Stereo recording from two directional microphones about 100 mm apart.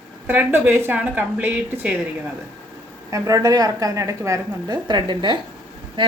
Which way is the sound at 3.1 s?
35° right (ahead or behind).